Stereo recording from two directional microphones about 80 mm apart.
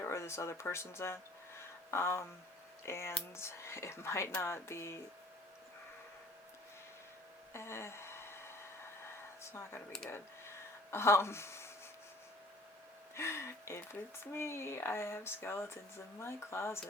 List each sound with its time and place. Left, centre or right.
0.0 s speech: left
7.5 s a sound: left
9.4 s speech: left
10.9 s speech: left
13.1 s speech: left